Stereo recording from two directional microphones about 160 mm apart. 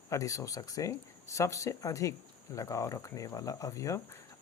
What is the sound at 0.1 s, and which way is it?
Speech, 20° left (ahead or behind).